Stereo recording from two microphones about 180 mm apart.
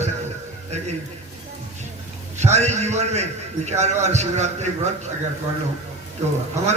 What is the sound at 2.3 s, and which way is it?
A man's voice, 40° right (ahead or behind).